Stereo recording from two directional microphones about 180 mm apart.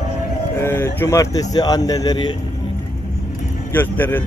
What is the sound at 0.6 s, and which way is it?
Speech, 15° left (ahead or behind).